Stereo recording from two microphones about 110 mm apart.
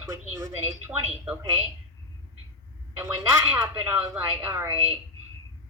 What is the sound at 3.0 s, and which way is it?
Speech, 25° right (ahead or behind).